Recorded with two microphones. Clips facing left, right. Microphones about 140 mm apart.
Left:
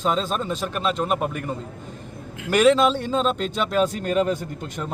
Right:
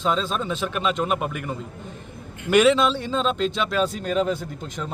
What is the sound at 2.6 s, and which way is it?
Speech, centre (ahead or behind).